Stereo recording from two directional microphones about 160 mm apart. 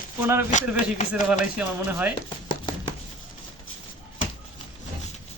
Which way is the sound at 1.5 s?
10° right (ahead or behind).